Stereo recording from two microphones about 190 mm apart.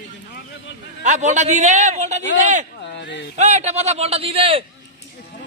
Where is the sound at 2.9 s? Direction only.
65° left (ahead or behind).